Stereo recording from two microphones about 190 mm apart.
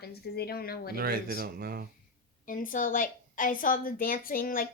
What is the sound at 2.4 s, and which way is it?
A woman's voice, 45° left (ahead or behind).